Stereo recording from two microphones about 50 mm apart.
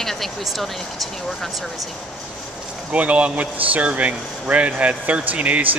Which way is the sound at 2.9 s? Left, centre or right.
Right.